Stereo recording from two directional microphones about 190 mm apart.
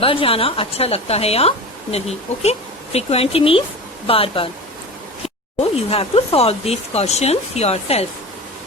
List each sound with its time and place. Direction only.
0.0 s a woman's voice: 30° left (ahead or behind)
5.5 s a woman's voice: 30° left (ahead or behind)